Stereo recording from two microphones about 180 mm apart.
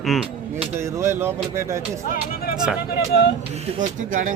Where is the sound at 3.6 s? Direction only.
45° right (ahead or behind).